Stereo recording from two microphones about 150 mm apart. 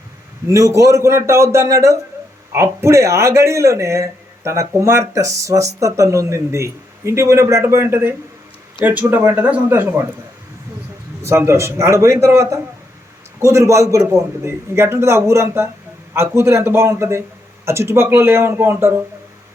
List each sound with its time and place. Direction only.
0.4 s speech: 20° right (ahead or behind)
11.2 s speech: 20° right (ahead or behind)